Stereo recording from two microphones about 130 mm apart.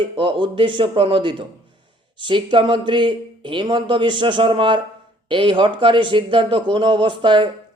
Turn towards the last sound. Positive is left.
turn(degrees=-40)  # may be behind; listen again after turning